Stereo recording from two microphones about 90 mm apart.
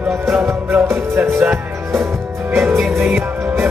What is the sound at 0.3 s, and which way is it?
Music, 25° right (ahead or behind).